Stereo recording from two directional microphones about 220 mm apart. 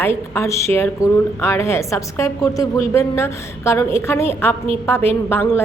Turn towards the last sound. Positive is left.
turn(degrees=10)  # may be behind; listen again after turning